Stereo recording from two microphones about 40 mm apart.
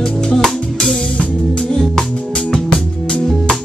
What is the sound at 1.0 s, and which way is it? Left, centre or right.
Music, left.